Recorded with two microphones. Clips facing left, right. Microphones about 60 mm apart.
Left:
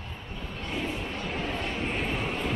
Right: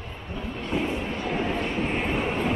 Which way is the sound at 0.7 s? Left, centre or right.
Right.